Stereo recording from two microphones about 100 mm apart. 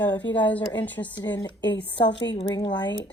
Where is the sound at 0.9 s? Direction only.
20° left (ahead or behind).